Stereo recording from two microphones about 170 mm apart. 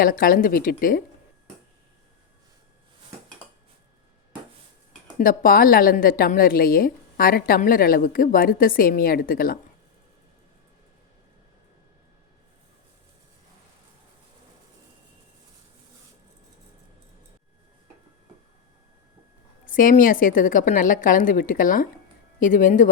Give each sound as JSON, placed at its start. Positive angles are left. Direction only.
{"t": 0.0, "sound": "a woman's voice", "side_deg": 55}
{"t": 5.2, "sound": "a woman's voice", "side_deg": 55}
{"t": 19.6, "sound": "a woman's voice", "side_deg": 50}